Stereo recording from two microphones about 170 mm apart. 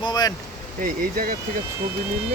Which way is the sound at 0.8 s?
55° right (ahead or behind).